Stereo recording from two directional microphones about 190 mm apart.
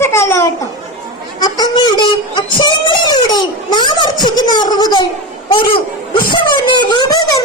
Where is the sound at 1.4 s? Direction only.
20° left (ahead or behind).